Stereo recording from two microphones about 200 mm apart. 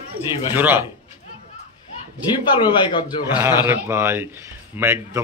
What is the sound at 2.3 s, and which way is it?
Speech, 20° left (ahead or behind).